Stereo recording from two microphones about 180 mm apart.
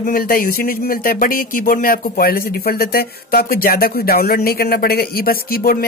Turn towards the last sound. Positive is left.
turn(degrees=55)  # may be behind; listen again after turning